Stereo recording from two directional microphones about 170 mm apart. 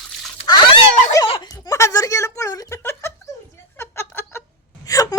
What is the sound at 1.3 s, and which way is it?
Speech, 25° left (ahead or behind).